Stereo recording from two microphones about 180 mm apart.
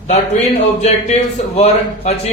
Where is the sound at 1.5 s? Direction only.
35° left (ahead or behind).